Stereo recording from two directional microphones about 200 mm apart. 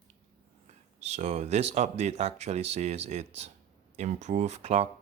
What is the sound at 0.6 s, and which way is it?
Speech, 35° right (ahead or behind).